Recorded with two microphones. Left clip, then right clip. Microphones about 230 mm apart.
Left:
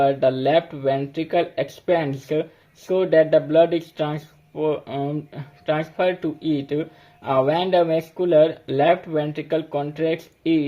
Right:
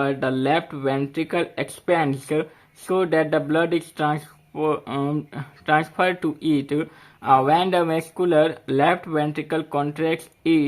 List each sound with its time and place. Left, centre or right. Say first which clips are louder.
0.0 s speech: left 4 dB; right